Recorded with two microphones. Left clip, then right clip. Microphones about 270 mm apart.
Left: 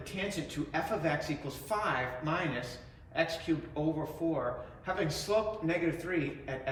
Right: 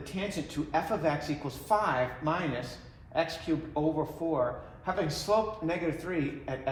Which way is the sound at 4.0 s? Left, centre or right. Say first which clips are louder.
Right 4 dB; centre.